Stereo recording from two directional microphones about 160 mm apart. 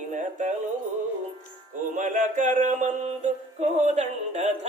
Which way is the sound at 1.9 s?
50° right (ahead or behind).